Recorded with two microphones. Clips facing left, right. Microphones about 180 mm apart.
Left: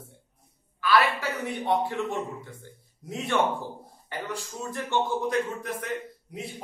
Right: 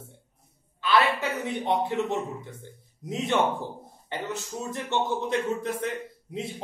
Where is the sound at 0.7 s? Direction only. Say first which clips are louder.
Even; 25° right (ahead or behind).